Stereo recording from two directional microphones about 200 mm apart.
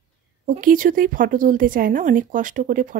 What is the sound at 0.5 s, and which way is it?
A woman's voice, 45° right (ahead or behind).